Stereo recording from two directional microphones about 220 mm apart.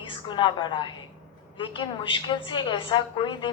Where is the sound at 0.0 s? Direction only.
20° left (ahead or behind).